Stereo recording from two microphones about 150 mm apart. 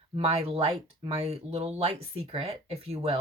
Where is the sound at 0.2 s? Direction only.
40° right (ahead or behind).